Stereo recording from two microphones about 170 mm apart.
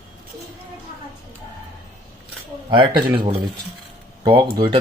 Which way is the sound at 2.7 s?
30° right (ahead or behind).